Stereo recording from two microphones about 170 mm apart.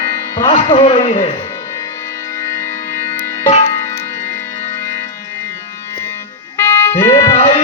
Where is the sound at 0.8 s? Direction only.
45° left (ahead or behind).